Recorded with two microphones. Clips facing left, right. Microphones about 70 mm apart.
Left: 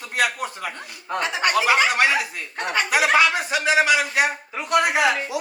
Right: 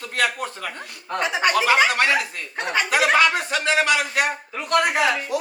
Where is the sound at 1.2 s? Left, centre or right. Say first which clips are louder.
Right 2 dB; right.